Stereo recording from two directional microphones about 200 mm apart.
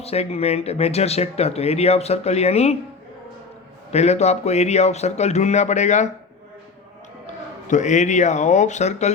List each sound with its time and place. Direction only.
0.0 s speech: 30° left (ahead or behind)
3.9 s speech: 35° left (ahead or behind)
7.7 s speech: 35° left (ahead or behind)